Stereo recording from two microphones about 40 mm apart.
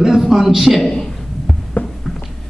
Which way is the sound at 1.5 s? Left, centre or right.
Centre.